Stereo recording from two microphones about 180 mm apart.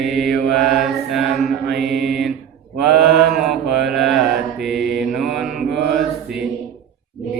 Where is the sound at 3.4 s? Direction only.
Centre (ahead or behind).